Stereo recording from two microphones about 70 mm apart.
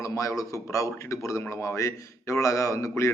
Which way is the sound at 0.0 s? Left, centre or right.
Left.